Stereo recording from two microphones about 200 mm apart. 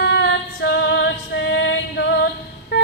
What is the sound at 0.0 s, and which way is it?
Female singing, 65° left (ahead or behind).